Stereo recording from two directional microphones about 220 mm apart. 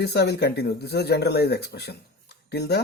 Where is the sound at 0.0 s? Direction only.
50° left (ahead or behind).